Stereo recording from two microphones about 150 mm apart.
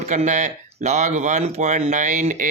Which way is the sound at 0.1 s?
55° right (ahead or behind).